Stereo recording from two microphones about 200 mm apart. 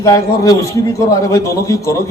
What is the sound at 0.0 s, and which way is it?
A man's voice, 15° left (ahead or behind).